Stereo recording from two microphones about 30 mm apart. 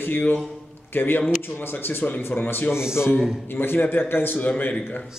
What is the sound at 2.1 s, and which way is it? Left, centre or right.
Speech, left.